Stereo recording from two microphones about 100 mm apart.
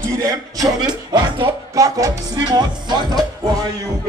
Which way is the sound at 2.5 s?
45° right (ahead or behind).